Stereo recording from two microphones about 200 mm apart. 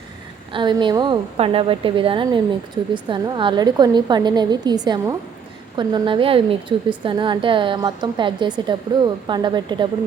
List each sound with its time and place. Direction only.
0.5 s a woman's voice: 25° right (ahead or behind)